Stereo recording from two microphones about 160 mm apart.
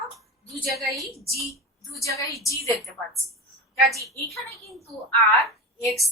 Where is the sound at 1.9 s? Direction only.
20° left (ahead or behind).